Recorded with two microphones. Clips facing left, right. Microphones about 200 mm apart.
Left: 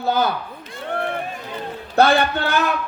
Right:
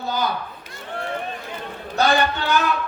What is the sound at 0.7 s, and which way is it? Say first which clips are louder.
Run: left 6 dB; 60° left (ahead or behind).